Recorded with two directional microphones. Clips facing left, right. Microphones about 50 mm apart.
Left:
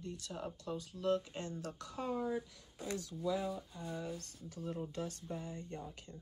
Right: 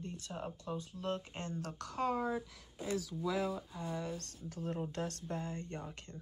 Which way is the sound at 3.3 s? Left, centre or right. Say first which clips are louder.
Right 3 dB; right.